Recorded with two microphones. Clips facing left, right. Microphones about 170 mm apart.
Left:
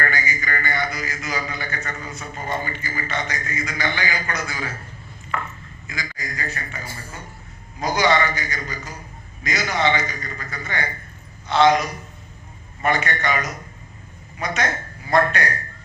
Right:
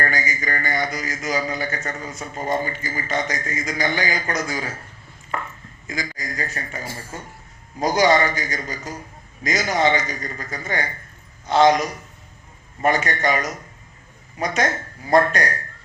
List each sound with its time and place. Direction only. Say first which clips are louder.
0.0 s a man's voice: right 1 dB; 40° right (ahead or behind)
5.9 s a man's voice: right 3 dB; 40° right (ahead or behind)